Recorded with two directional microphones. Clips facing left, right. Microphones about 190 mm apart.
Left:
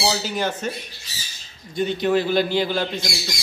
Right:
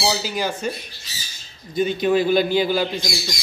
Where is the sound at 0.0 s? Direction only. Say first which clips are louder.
Even; 5° right (ahead or behind).